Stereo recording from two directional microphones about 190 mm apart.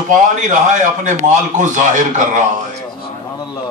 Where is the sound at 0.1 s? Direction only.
40° right (ahead or behind).